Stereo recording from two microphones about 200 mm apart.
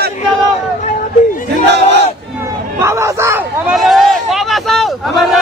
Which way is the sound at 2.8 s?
15° right (ahead or behind).